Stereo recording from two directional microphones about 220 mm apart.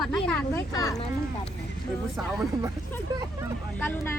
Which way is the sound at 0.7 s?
15° left (ahead or behind).